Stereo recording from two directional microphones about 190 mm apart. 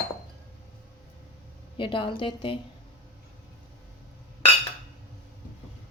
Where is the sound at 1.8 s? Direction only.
25° left (ahead or behind).